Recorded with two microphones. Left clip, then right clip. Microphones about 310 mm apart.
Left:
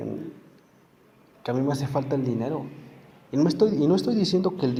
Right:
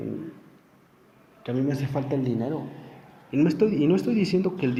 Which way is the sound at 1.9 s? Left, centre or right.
Centre.